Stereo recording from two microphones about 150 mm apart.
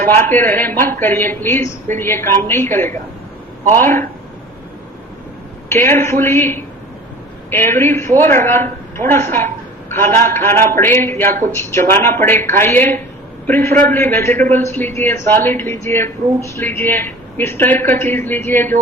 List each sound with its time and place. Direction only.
0.2 s speech: 15° left (ahead or behind)
5.6 s a woman's voice: 15° left (ahead or behind)